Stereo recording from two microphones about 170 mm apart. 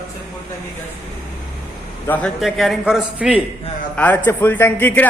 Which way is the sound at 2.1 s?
5° left (ahead or behind).